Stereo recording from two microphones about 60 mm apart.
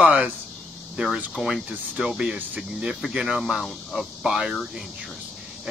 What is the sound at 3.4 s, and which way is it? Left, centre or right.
Speech, centre.